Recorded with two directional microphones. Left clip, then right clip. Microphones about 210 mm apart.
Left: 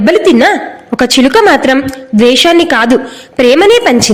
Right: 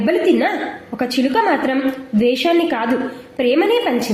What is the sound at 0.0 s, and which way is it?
A woman's voice, 45° left (ahead or behind).